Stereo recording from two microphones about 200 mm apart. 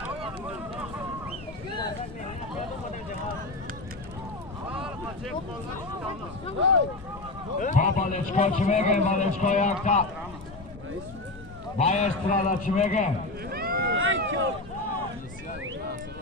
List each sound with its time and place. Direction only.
4.7 s vehicle: 5° right (ahead or behind)
7.5 s a man's voice: 40° left (ahead or behind)
11.8 s a man's voice: 35° left (ahead or behind)
13.5 s boat: 50° right (ahead or behind)
13.9 s run: 80° right